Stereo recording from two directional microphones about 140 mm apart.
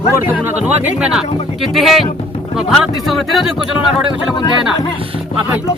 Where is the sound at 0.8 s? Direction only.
5° right (ahead or behind).